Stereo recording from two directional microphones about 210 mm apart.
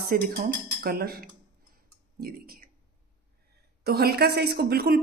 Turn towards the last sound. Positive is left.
turn(degrees=-45)  # may be behind; listen again after turning